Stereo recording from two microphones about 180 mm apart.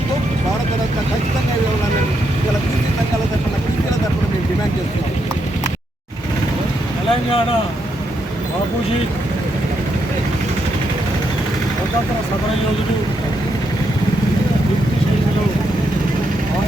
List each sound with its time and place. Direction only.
7.1 s speech: 30° left (ahead or behind)